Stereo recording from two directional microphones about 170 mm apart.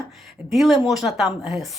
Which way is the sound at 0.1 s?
Centre (ahead or behind).